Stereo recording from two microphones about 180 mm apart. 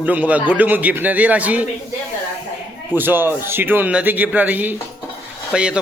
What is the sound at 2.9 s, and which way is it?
A man's voice, 10° right (ahead or behind).